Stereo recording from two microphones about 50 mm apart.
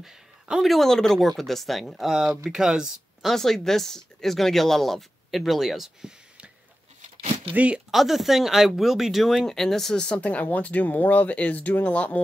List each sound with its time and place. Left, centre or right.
0.6 s speech: centre
2.5 s speech: centre
3.3 s speech: centre
7.5 s speech: right
7.9 s speech: centre
9.9 s speech: left